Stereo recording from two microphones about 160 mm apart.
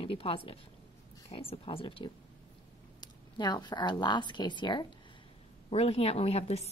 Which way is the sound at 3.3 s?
25° left (ahead or behind).